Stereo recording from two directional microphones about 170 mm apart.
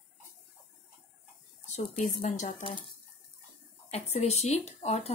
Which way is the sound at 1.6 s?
45° left (ahead or behind).